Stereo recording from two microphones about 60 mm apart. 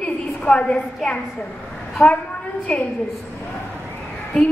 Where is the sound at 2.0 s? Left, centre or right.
Left.